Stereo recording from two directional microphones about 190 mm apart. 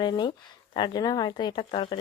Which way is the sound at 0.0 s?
25° left (ahead or behind).